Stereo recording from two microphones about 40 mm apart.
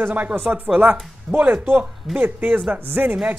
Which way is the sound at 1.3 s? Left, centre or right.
Right.